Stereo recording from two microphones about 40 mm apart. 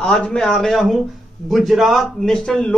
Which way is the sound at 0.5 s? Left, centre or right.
Centre.